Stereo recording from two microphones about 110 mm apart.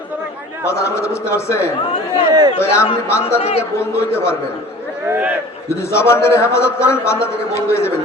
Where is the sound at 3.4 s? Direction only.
70° left (ahead or behind).